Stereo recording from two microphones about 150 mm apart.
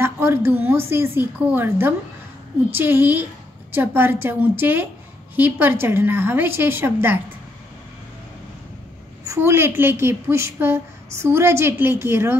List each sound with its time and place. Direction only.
0.0 s a woman's voice: 15° right (ahead or behind)
9.2 s a woman's voice: 20° right (ahead or behind)